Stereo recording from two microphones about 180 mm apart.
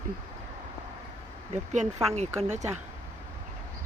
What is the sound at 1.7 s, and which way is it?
Speech, 40° right (ahead or behind).